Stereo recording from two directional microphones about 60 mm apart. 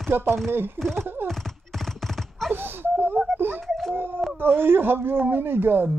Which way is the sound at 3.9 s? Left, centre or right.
Right.